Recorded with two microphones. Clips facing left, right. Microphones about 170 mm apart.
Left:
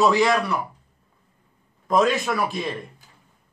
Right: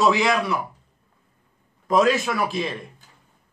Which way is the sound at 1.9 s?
Centre (ahead or behind).